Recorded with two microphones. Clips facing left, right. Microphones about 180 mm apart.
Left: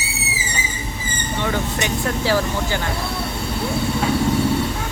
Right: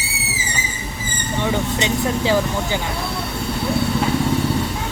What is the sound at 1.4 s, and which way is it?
Speech, 20° right (ahead or behind).